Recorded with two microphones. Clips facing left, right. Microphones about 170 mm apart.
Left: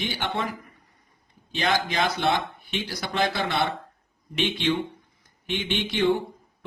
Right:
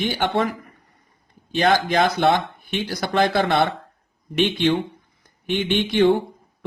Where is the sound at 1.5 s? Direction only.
50° right (ahead or behind).